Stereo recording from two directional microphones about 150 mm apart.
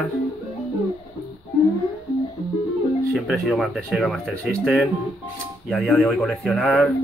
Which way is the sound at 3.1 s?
Centre (ahead or behind).